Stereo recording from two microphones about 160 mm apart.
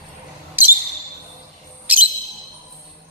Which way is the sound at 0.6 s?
10° right (ahead or behind).